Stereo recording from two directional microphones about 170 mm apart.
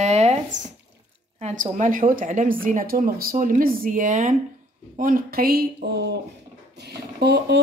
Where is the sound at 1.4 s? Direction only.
45° right (ahead or behind); by 6.1 s 75° right (ahead or behind).